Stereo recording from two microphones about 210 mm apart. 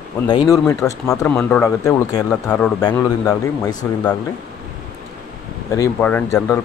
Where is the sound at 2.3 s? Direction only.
5° left (ahead or behind).